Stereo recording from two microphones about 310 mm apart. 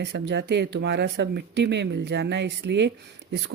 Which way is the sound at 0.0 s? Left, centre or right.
Right.